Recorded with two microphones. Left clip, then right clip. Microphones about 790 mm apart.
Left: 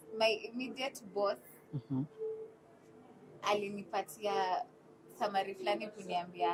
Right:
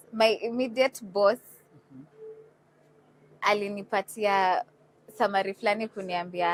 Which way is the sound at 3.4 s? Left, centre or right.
Right.